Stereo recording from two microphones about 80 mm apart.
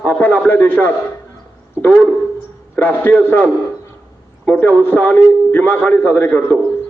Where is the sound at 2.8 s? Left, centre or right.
Left.